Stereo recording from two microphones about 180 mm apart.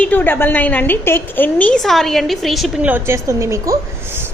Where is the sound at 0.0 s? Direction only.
10° left (ahead or behind); by 4.3 s 15° right (ahead or behind).